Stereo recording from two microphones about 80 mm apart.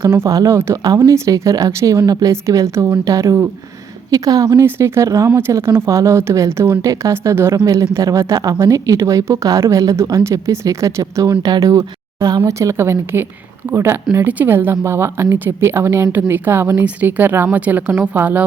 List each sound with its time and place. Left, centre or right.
0.1 s a woman's voice: right
2.3 s speech: right
4.1 s a woman's voice: right
4.6 s speech: right
7.5 s a woman's voice: right
11.3 s speech: right
11.6 s speech: right
12.5 s a woman's voice: right